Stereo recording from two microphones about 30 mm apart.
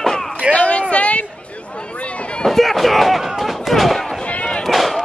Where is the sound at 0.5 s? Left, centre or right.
Left.